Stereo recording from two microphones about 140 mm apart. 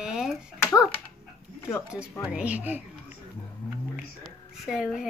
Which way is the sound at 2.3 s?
10° right (ahead or behind).